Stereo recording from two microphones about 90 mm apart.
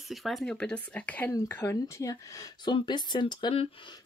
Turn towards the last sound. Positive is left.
turn(degrees=65)  # may be behind; listen again after turning